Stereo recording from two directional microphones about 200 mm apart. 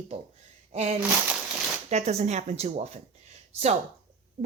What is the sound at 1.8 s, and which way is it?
Speech, 35° right (ahead or behind).